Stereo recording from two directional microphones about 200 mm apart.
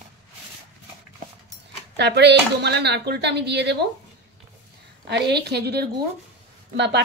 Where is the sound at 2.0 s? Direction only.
60° right (ahead or behind).